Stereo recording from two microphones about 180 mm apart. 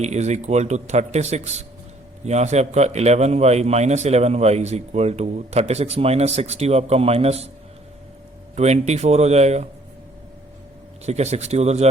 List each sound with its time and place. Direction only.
0.0 s a man's voice: 40° right (ahead or behind)
8.5 s a man's voice: 40° right (ahead or behind)
11.0 s a man's voice: 35° right (ahead or behind)